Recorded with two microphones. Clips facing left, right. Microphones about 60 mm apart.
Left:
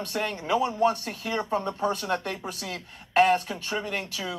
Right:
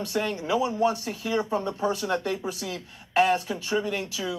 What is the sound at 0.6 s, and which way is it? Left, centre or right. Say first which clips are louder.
Speech: left 1 dB; left.